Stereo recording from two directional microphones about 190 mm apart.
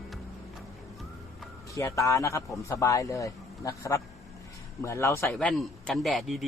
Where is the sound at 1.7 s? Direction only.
15° left (ahead or behind).